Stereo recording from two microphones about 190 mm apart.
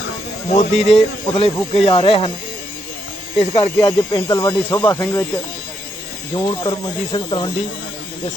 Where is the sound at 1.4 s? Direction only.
25° left (ahead or behind).